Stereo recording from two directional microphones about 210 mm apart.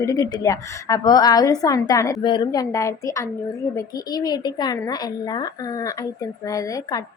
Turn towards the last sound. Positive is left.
turn(degrees=20)  # may be behind; listen again after turning